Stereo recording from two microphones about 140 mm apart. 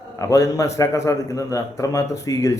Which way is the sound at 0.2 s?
25° left (ahead or behind).